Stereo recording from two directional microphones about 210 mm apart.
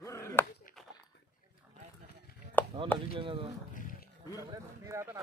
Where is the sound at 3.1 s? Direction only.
25° right (ahead or behind).